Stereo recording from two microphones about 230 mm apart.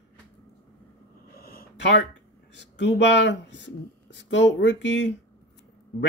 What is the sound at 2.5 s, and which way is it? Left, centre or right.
Speech, left.